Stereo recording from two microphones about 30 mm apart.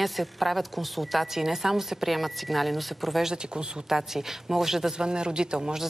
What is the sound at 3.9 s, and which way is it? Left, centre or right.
Speech, centre.